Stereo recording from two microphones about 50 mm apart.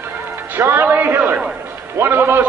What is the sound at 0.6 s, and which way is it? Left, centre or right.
Music, right.